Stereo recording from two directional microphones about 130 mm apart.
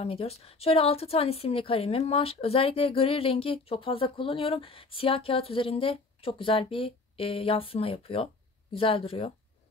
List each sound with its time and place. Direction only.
0.0 s a woman's voice: 50° left (ahead or behind)